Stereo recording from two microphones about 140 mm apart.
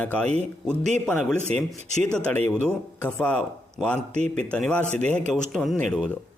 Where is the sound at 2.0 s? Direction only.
10° left (ahead or behind).